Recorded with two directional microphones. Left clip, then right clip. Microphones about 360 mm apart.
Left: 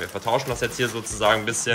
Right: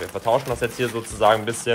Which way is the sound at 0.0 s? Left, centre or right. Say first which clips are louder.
Right 3 dB; centre.